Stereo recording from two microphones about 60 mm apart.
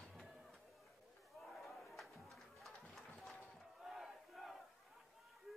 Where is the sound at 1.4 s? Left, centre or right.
Centre.